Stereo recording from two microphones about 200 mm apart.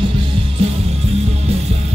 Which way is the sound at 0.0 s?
25° right (ahead or behind).